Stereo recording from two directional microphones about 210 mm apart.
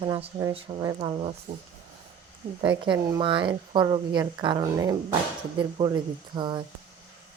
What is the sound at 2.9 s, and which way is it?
Speech, 25° right (ahead or behind).